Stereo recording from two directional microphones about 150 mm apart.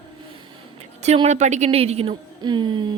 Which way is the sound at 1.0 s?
45° right (ahead or behind).